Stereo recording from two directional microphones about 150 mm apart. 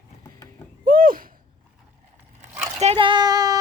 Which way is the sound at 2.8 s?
40° right (ahead or behind).